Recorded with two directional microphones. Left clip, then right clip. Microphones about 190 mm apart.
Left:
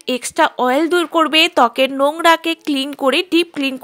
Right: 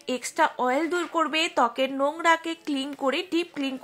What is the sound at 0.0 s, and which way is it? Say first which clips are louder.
Speech: left 8 dB; 40° left (ahead or behind).